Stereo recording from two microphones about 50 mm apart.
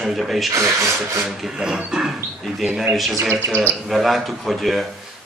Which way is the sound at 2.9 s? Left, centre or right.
Centre.